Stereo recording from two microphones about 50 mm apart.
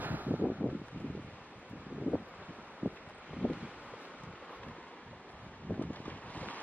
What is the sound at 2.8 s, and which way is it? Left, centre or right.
Wind, right.